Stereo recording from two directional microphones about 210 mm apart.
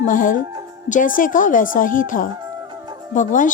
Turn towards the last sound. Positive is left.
turn(degrees=35)  # may be behind; listen again after turning